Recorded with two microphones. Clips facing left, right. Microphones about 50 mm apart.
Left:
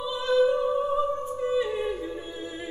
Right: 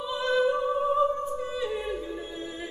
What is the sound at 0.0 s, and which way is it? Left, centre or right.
Music, right.